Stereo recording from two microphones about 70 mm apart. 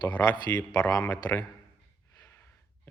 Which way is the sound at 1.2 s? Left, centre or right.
Left.